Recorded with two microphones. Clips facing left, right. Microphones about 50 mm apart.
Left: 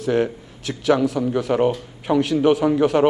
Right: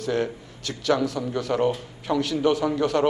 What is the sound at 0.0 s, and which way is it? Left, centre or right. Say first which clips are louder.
A man's voice: left 5 dB; centre.